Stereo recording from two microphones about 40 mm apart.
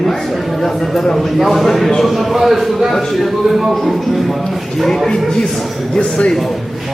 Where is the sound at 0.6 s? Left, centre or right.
Centre.